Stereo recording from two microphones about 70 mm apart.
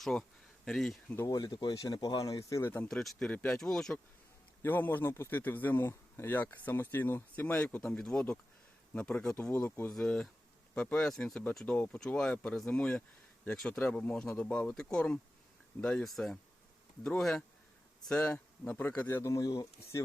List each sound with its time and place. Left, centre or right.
0.0 s a sound: centre
1.3 s speech: left
1.7 s speech: left
2.9 s speech: centre
3.2 s speech: left
3.5 s speech: centre
4.6 s speech: left
9.9 s speech: centre
11.6 s speech: left
11.9 s speech: centre
13.7 s speech: left; by 17.4 s centre
18.3 s speech: left
19.2 s speech: left